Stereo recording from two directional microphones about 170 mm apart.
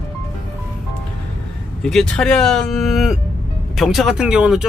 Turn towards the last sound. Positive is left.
turn(degrees=-5)  # may be behind; listen again after turning